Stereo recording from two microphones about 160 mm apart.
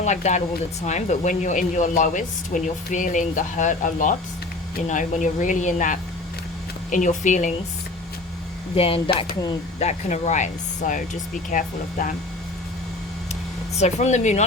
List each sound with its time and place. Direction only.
0.0 s speech: 45° left (ahead or behind)
8.7 s speech: 35° left (ahead or behind)
9.8 s speech: 45° left (ahead or behind)
13.7 s speech: 45° left (ahead or behind)